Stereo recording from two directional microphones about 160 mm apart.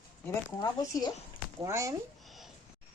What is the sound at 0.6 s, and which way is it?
Speech, 20° left (ahead or behind).